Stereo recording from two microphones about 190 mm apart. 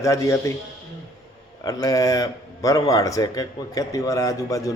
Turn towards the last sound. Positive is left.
turn(degrees=15)  # may be behind; listen again after turning